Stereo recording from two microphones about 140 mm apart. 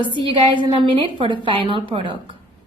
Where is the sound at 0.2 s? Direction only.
35° right (ahead or behind).